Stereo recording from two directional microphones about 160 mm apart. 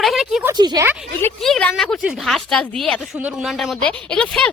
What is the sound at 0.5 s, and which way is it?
Speech, 25° right (ahead or behind).